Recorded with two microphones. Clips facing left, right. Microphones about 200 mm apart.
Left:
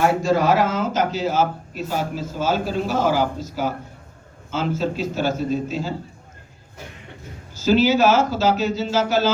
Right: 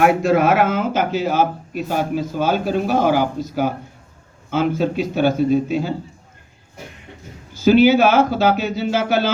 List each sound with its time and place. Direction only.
0.0 s a man's voice: 60° right (ahead or behind)
7.5 s a man's voice: 60° right (ahead or behind)